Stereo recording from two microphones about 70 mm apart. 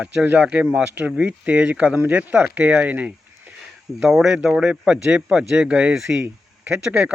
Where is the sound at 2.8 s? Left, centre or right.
Right.